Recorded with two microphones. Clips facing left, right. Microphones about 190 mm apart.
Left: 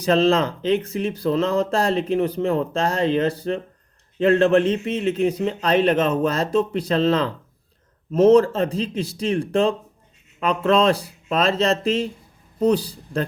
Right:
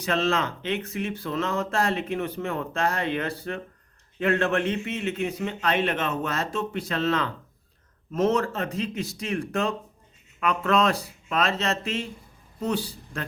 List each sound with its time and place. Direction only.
0.0 s a man's voice: 35° left (ahead or behind)